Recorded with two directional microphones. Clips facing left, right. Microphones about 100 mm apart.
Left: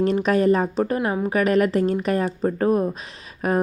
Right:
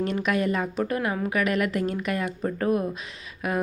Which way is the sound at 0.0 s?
35° left (ahead or behind).